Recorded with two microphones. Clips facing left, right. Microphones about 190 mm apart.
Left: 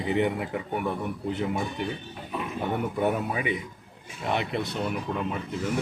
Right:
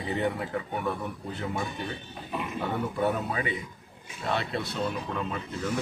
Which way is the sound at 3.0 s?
15° left (ahead or behind).